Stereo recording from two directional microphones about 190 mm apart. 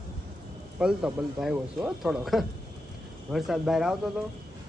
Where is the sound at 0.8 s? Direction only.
5° right (ahead or behind).